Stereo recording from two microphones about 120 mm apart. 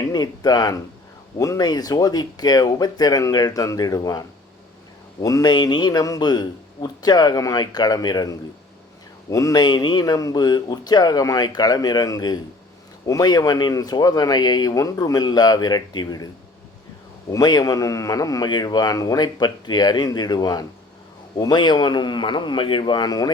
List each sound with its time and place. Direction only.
0.0 s a man's voice: 35° left (ahead or behind)
17.3 s a man's voice: 35° left (ahead or behind)